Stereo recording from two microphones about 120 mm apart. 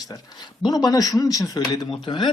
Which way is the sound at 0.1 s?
35° left (ahead or behind).